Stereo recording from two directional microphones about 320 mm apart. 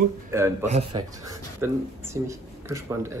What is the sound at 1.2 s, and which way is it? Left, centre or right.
Speech, centre.